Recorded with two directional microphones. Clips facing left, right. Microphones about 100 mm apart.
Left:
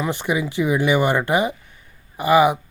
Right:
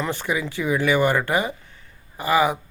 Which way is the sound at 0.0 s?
15° left (ahead or behind).